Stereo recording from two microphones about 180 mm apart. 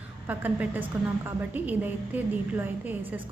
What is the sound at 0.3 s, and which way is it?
A woman's voice, 10° right (ahead or behind).